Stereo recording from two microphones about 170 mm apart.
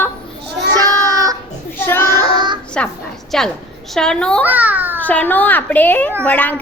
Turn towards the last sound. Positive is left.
turn(degrees=10)  # may be behind; listen again after turning